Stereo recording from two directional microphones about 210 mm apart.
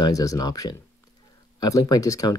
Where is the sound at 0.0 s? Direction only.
15° left (ahead or behind).